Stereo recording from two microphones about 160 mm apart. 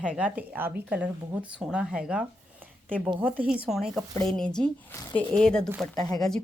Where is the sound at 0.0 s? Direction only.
5° right (ahead or behind).